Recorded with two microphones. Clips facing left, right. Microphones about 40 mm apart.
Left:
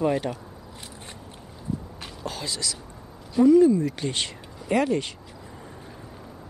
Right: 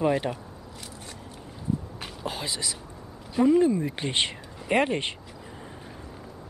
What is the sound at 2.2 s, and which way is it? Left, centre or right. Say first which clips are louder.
Speech: even; centre.